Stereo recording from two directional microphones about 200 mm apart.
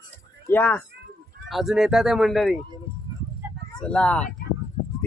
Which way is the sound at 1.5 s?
Centre (ahead or behind).